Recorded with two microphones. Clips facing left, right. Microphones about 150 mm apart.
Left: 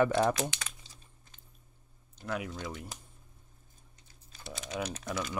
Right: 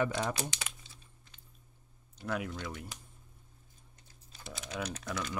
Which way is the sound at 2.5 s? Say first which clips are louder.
Left 1 dB; 20° left (ahead or behind).